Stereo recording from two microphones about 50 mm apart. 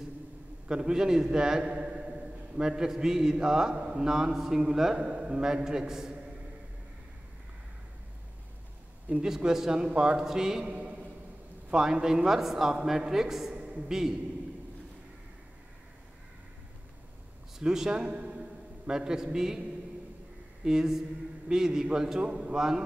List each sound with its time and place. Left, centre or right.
0.7 s a man's voice: centre
4.9 s a man's voice: right
9.2 s a man's voice: centre
10.7 s a sound: right
11.7 s a man's voice: centre
13.5 s a sound: right
13.8 s a man's voice: centre
17.6 s a man's voice: centre
20.6 s a man's voice: centre